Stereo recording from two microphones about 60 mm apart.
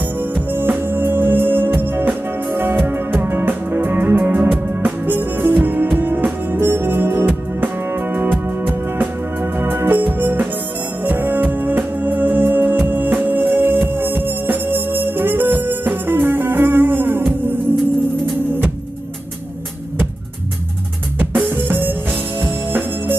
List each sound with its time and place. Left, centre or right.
0.2 s music: right
21.5 s music: right